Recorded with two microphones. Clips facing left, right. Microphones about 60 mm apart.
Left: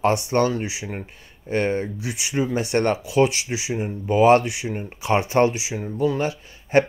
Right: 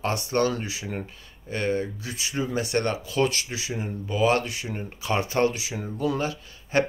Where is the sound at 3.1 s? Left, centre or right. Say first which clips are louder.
Left 5 dB; centre.